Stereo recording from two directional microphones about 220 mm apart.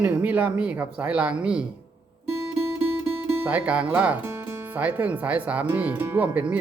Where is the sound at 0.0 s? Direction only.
10° right (ahead or behind).